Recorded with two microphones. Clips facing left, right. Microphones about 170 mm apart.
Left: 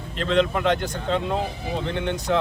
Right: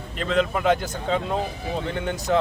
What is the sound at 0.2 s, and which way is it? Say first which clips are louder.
Speech: left 2 dB; 5° right (ahead or behind).